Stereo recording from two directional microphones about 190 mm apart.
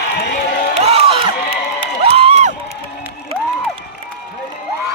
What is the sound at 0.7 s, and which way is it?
Music, 30° right (ahead or behind).